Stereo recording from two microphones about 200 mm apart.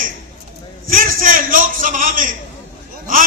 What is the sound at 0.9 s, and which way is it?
A man's voice, 45° right (ahead or behind).